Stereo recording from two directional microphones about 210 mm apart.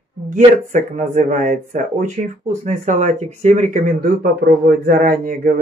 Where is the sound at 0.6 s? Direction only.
35° right (ahead or behind).